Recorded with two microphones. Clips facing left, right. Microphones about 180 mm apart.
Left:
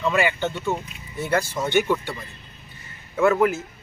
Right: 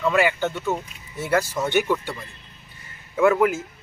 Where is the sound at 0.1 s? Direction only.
5° right (ahead or behind).